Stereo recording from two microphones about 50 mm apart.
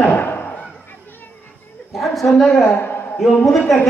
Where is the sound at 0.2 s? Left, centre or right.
Left.